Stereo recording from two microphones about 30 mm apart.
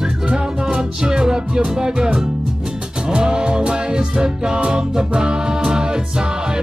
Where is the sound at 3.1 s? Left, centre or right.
Right.